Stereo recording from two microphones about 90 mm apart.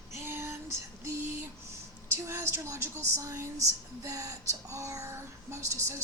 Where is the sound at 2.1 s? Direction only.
25° right (ahead or behind).